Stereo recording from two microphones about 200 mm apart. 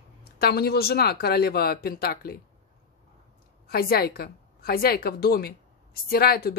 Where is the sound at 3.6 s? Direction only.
50° left (ahead or behind).